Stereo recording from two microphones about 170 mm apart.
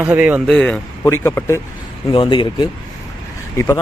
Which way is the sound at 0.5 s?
5° left (ahead or behind).